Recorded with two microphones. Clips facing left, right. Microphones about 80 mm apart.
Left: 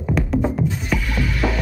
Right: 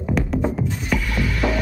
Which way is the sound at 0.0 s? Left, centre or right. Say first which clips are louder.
Left 1 dB; centre.